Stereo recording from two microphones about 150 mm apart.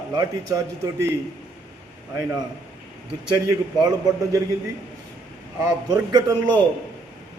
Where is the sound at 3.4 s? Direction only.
25° right (ahead or behind).